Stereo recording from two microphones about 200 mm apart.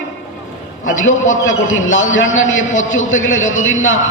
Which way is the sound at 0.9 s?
75° left (ahead or behind).